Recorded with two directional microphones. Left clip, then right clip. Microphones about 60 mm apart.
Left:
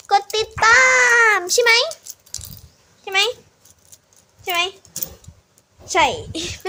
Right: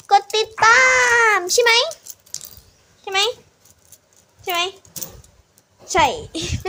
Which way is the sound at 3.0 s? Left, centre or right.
Centre.